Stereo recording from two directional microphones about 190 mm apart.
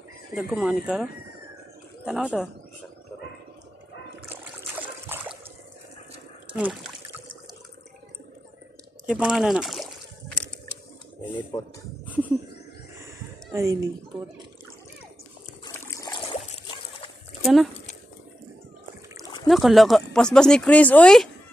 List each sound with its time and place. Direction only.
0.4 s speech: 5° right (ahead or behind)
4.3 s trickle: 10° right (ahead or behind)
6.5 s speech: centre (ahead or behind)
9.0 s a sound: 5° right (ahead or behind)
13.5 s speech: 15° right (ahead or behind)
15.7 s trickle: 15° left (ahead or behind)
16.3 s trickle: 30° left (ahead or behind)
17.4 s speech: centre (ahead or behind)
19.4 s speech: centre (ahead or behind)